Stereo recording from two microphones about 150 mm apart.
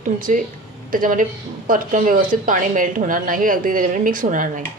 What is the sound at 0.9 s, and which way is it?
A woman's voice, 65° right (ahead or behind).